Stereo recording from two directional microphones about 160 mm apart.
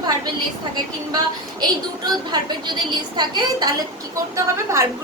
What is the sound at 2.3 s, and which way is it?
A woman's voice, 25° right (ahead or behind).